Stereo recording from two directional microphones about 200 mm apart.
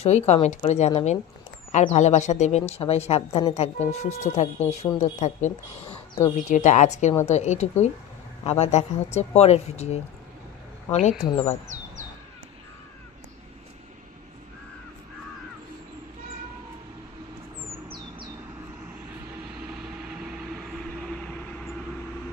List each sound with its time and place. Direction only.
0.0 s a woman's voice: 35° left (ahead or behind)
11.2 s speech: 20° left (ahead or behind)
19.6 s vehicle: 5° right (ahead or behind)